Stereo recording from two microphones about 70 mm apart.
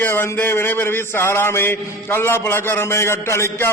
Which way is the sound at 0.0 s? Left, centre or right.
Left.